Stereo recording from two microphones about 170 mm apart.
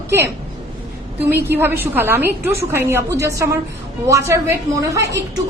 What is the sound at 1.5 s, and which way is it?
A woman's voice, 10° right (ahead or behind).